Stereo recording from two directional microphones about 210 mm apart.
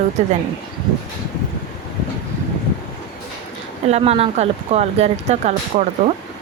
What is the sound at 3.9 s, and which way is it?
Speech, 30° right (ahead or behind).